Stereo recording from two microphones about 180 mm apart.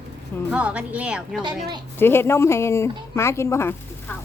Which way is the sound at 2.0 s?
15° left (ahead or behind).